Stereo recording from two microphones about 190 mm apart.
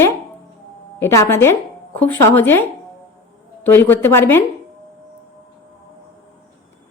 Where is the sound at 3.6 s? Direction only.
10° left (ahead or behind).